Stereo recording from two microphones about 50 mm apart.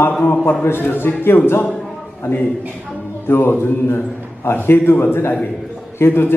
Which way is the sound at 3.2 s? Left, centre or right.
Left.